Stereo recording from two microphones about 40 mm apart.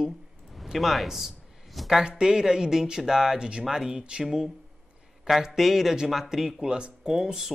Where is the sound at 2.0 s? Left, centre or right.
Centre.